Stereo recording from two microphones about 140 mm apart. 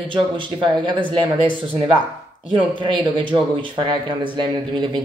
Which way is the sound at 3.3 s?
35° right (ahead or behind).